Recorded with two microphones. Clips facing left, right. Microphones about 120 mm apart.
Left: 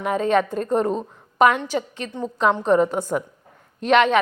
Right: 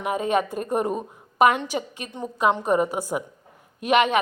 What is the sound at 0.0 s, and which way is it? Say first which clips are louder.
A woman's voice: left 3 dB; 10° right (ahead or behind).